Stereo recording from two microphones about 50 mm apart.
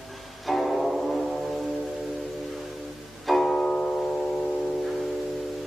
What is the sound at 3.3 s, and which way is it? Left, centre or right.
Music, centre.